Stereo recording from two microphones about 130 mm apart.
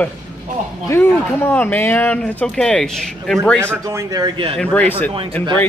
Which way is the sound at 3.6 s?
25° right (ahead or behind).